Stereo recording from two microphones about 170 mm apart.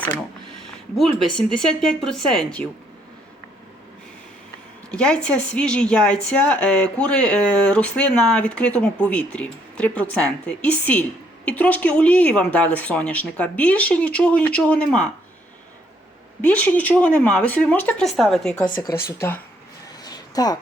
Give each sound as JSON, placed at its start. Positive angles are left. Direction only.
{"t": 0.9, "sound": "speech", "side_deg": 0}
{"t": 4.9, "sound": "a woman's voice", "side_deg": 5}
{"t": 16.4, "sound": "a woman's voice", "side_deg": 10}
{"t": 18.8, "sound": "a woman's voice", "side_deg": 15}
{"t": 20.1, "sound": "a sound", "side_deg": 20}